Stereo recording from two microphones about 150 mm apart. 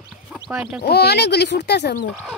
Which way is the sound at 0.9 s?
90° left.